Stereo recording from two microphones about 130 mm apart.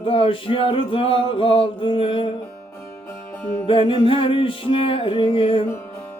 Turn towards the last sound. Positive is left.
turn(degrees=45)  # may be behind; listen again after turning